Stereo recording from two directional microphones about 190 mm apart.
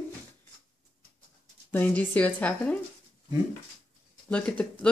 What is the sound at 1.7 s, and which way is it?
Speech, 10° left (ahead or behind).